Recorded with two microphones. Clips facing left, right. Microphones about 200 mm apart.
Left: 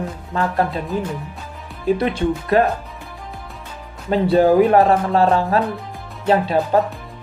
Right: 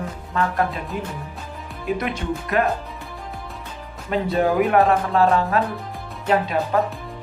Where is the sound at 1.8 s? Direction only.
30° left (ahead or behind).